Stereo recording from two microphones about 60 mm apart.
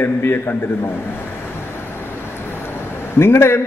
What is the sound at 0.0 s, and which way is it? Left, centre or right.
Speech, left.